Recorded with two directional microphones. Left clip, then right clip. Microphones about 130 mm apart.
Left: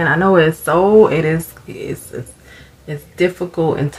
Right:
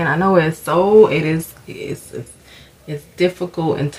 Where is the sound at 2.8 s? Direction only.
35° right (ahead or behind).